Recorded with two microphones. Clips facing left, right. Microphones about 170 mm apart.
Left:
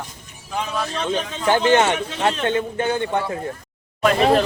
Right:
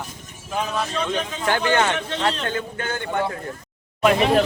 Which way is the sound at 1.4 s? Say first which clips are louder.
Left 5 dB; 20° left (ahead or behind).